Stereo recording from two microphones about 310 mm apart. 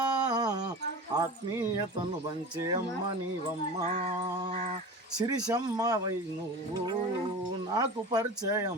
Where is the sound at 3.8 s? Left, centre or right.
Right.